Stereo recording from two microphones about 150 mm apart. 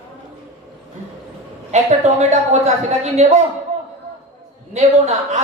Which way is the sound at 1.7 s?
50° right (ahead or behind).